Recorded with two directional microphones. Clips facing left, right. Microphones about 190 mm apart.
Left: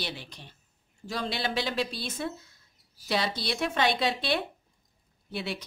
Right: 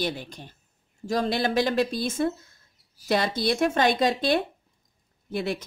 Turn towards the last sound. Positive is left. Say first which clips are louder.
# right 6 dB
turn(degrees=-45)  # may be behind; listen again after turning